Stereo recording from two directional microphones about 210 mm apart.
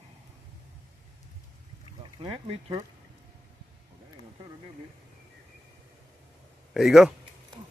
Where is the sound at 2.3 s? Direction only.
15° right (ahead or behind).